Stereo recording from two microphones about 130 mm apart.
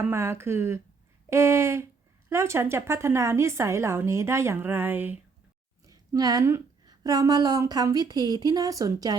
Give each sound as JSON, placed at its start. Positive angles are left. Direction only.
{"t": 0.0, "sound": "a woman's voice", "side_deg": -20}
{"t": 5.8, "sound": "a woman's voice", "side_deg": -25}